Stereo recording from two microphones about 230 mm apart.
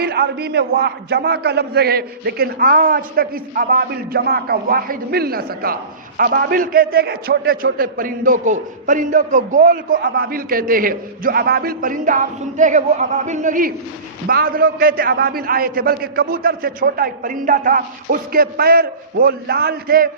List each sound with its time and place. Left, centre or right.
0.0 s a man's voice: right